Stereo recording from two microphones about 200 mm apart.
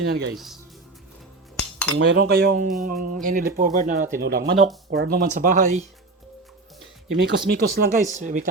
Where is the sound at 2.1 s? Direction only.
50° right (ahead or behind).